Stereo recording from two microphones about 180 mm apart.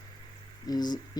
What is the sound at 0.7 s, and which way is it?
Speech, 20° left (ahead or behind).